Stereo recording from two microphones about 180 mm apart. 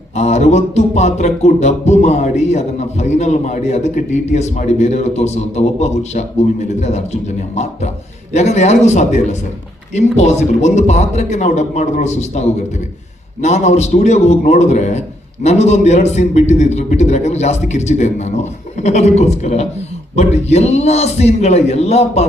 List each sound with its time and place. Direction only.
0.2 s speech: 40° left (ahead or behind)